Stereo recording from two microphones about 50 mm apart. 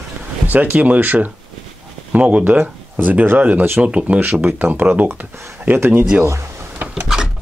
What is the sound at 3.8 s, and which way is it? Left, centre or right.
Speech, right.